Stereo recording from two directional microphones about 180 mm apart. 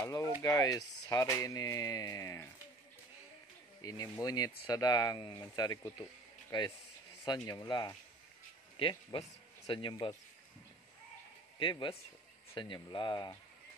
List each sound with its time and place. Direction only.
0.0 s speech: 20° left (ahead or behind)
3.8 s speech: 20° left (ahead or behind)
11.6 s speech: 30° left (ahead or behind)